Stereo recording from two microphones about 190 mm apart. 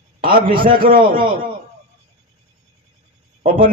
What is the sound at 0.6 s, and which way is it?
Speech, 50° right (ahead or behind).